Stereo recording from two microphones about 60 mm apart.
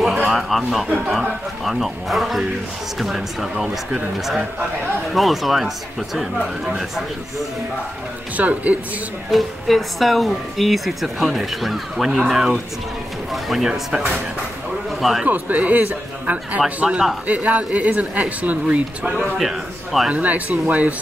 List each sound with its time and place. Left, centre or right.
0.0 s a sound: centre
1.6 s speech: centre
8.4 s speech: right
9.3 s speech: centre
15.2 s speech: right
19.3 s a man's voice: centre
20.1 s speech: right